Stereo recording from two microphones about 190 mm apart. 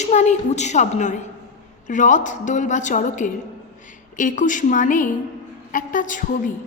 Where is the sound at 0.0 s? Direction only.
35° left (ahead or behind).